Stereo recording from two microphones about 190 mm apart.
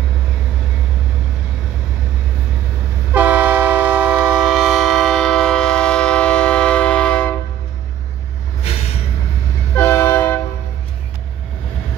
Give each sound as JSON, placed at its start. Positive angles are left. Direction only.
{"t": 3.1, "sound": "train", "side_deg": -10}
{"t": 8.6, "sound": "vehicle", "side_deg": 35}
{"t": 9.8, "sound": "train", "side_deg": 10}